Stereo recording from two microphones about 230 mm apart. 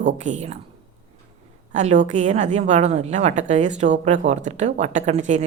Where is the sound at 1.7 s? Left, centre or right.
Right.